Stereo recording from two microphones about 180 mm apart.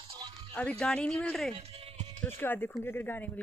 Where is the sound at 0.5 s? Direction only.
5° left (ahead or behind).